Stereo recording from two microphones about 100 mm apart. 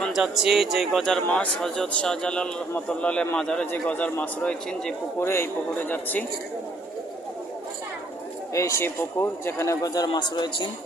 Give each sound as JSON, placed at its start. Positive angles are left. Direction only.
{"t": 0.1, "sound": "a man's voice", "side_deg": -5}
{"t": 5.2, "sound": "a man's voice", "side_deg": 25}
{"t": 8.5, "sound": "a man's voice", "side_deg": 30}